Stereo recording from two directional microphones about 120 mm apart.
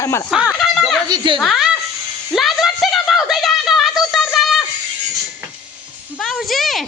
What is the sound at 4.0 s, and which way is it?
Synthetic singing, centre (ahead or behind).